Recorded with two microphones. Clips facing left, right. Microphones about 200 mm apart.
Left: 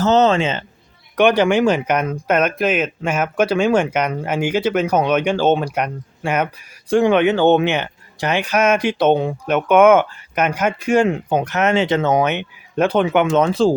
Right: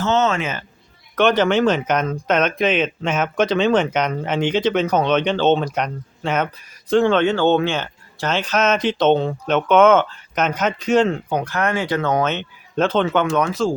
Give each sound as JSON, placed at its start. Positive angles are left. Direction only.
{"t": 0.0, "sound": "speech", "side_deg": 35}
{"t": 1.1, "sound": "speech", "side_deg": 15}
{"t": 13.4, "sound": "speech", "side_deg": 30}